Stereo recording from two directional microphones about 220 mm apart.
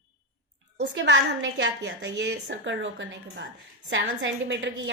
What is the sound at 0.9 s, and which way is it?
A woman's voice, 55° right (ahead or behind).